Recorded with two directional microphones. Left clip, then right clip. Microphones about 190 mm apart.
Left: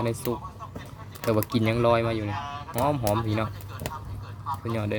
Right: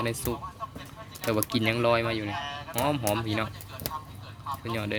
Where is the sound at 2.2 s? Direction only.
45° right (ahead or behind).